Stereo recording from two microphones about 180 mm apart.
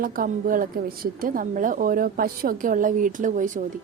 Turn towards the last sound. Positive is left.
turn(degrees=-45)  # may be behind; listen again after turning